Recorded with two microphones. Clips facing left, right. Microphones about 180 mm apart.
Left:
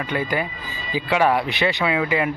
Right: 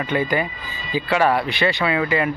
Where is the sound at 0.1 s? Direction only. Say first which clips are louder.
Right 3 dB; 5° left (ahead or behind).